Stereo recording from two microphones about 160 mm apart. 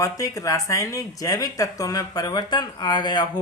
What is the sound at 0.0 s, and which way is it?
Speech, 20° left (ahead or behind).